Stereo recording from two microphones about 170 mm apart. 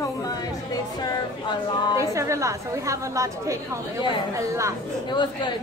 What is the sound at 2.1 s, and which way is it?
A woman's voice, 20° right (ahead or behind).